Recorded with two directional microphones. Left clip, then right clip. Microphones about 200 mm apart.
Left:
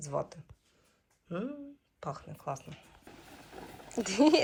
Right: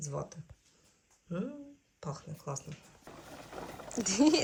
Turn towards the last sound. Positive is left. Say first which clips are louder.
# left 2 dB
turn(degrees=0)  # may be behind; listen again after turning